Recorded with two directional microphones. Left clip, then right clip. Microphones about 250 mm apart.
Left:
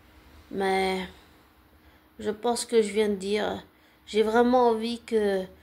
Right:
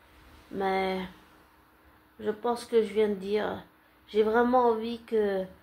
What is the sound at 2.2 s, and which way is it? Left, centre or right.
Speech, left.